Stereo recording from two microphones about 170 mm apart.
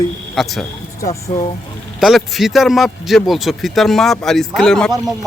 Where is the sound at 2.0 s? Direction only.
Centre (ahead or behind).